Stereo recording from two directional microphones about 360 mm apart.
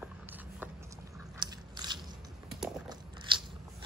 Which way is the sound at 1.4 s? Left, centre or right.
Centre.